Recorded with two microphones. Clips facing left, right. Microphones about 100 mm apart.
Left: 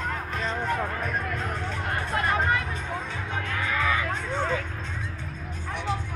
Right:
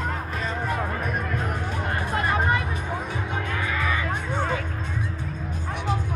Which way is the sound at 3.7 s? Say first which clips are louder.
Left 2 dB; centre (ahead or behind).